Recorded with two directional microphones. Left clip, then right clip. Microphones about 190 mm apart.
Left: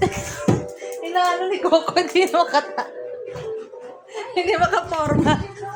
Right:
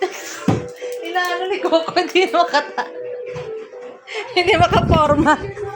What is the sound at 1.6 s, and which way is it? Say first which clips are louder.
Speech: even; 20° left (ahead or behind).